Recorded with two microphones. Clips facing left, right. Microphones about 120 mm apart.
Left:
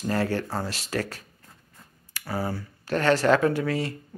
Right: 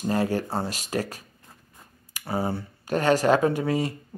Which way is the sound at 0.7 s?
15° right (ahead or behind).